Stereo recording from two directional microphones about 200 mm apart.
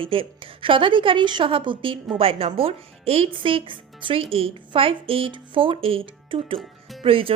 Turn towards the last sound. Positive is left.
turn(degrees=-25)  # may be behind; listen again after turning